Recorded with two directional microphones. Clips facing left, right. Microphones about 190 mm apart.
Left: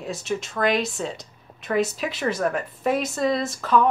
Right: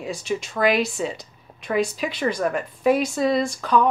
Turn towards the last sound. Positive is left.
turn(degrees=0)  # may be behind; listen again after turning